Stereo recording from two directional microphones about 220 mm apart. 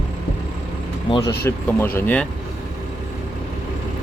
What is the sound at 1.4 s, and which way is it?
Speech, 10° left (ahead or behind).